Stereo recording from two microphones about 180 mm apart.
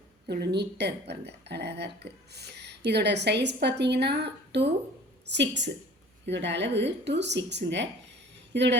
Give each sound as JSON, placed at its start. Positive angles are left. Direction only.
{"t": 0.3, "sound": "speech", "side_deg": -65}